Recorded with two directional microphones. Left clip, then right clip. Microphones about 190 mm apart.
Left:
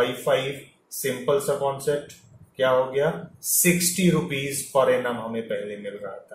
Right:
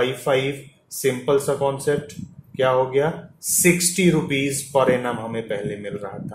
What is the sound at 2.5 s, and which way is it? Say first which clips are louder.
Speech: right 3 dB; 50° right (ahead or behind).